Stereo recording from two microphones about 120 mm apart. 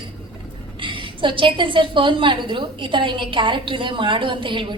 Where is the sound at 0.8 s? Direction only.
45° right (ahead or behind).